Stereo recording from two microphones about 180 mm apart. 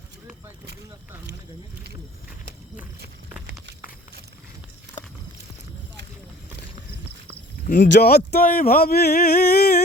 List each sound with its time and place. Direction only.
7.9 s speech: 65° left (ahead or behind)